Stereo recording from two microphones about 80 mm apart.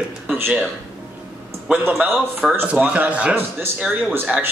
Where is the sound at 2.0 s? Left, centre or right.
Right.